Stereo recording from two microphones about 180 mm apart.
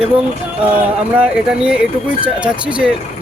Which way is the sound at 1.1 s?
5° right (ahead or behind).